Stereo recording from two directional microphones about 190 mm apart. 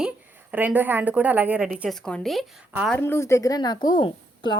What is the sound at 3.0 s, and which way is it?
A woman's voice, 15° left (ahead or behind).